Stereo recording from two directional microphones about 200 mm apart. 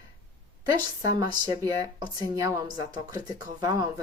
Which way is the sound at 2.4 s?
20° right (ahead or behind).